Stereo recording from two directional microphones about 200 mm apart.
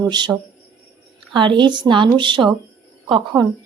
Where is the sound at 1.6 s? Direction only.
25° right (ahead or behind).